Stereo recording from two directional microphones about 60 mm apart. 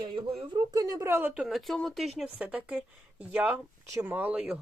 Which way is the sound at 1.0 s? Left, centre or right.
Right.